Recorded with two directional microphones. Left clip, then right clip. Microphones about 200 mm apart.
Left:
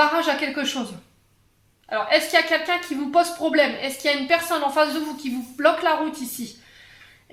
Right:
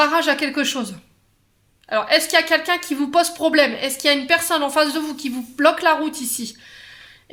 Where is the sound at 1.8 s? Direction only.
50° right (ahead or behind).